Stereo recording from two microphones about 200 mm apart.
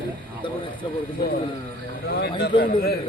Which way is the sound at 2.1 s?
50° left (ahead or behind).